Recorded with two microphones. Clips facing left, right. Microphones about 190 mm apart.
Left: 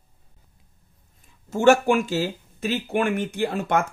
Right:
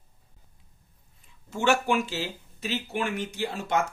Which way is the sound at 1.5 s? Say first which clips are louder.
Left 7 dB; 45° left (ahead or behind).